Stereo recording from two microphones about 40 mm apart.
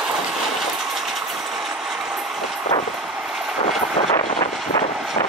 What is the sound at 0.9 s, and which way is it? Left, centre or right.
Vehicle, centre.